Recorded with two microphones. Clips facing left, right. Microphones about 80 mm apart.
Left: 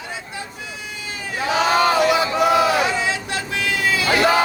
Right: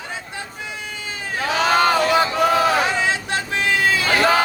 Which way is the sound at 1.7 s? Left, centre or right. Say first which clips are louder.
Right 1 dB; right.